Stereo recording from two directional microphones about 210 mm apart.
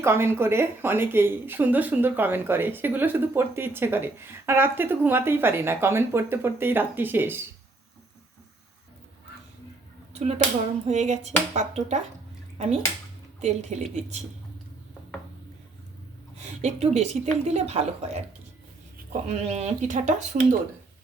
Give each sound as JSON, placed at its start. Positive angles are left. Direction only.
{"t": 0.0, "sound": "speech", "side_deg": -10}
{"t": 10.1, "sound": "a sound", "side_deg": -30}
{"t": 10.8, "sound": "speech", "side_deg": -35}
{"t": 13.4, "sound": "speech", "side_deg": -30}
{"t": 16.6, "sound": "speech", "side_deg": -30}
{"t": 19.3, "sound": "speech", "side_deg": -30}